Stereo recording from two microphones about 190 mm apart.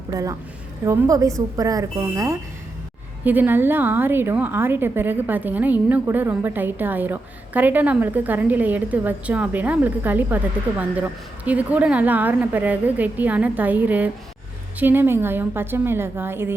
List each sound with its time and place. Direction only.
0.1 s a woman's voice: 15° right (ahead or behind)